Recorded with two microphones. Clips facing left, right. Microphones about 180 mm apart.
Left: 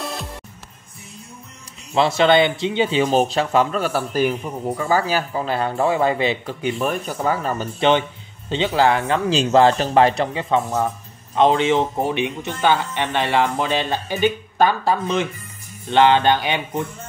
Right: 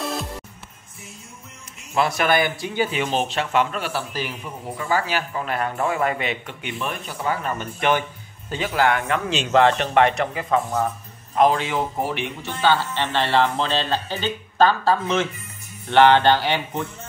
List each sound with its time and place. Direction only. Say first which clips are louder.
0.0 s music: right 2 dB; centre (ahead or behind)
2.0 s speech: left 5 dB; 25° left (ahead or behind)
3.0 s speech: left 6 dB; 40° left (ahead or behind)
8.5 s speech: left 3 dB; 25° left (ahead or behind)